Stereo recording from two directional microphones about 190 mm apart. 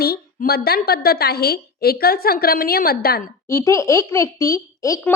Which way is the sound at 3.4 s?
15° left (ahead or behind).